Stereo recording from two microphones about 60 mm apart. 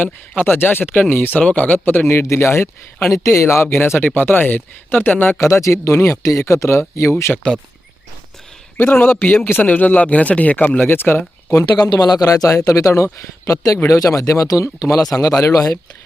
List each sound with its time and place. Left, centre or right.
0.0 s a man's voice: left
2.3 s speech: left
5.4 s speech: left
8.8 s a man's voice: left
10.8 s speech: left
11.5 s speech: left
14.6 s speech: left